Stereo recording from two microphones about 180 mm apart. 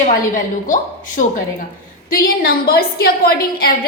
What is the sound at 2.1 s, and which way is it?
A woman's voice, 55° left (ahead or behind).